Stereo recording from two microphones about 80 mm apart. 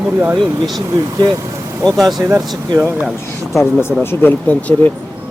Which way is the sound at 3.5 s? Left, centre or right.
Left.